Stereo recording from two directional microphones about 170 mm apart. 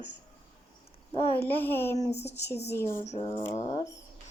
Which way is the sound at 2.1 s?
40° left (ahead or behind).